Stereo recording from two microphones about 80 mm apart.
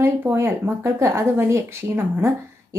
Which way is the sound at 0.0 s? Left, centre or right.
Right.